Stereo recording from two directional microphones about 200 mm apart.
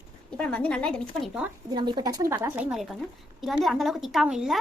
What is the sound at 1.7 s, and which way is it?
A woman's voice, 20° right (ahead or behind).